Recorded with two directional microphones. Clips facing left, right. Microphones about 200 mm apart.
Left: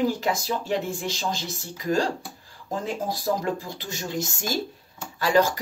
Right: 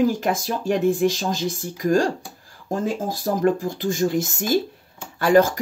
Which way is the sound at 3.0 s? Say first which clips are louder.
Right 6 dB; 50° right (ahead or behind).